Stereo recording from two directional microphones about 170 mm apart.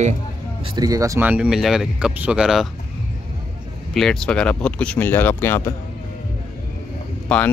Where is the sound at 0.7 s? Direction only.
20° right (ahead or behind); by 2.7 s centre (ahead or behind).